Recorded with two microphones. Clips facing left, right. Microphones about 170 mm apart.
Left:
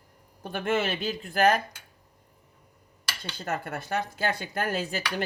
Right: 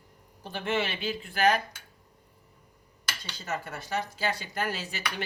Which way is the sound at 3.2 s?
55° left (ahead or behind).